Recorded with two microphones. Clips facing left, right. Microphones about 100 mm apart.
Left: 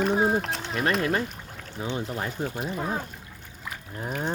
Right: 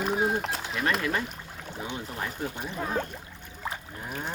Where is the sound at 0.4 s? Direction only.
5° right (ahead or behind).